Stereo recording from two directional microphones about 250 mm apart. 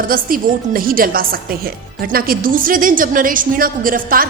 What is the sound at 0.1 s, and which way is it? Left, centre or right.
A woman's voice, right.